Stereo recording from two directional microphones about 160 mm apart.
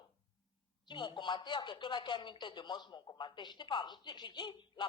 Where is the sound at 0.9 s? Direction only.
30° left (ahead or behind).